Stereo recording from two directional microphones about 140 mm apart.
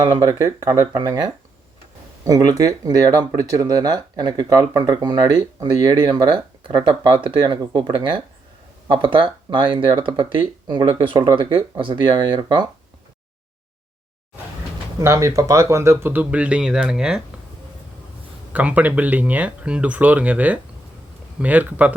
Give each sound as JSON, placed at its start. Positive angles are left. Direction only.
{"t": 0.0, "sound": "speech", "side_deg": -25}
{"t": 15.0, "sound": "speech", "side_deg": -20}
{"t": 18.5, "sound": "speech", "side_deg": -10}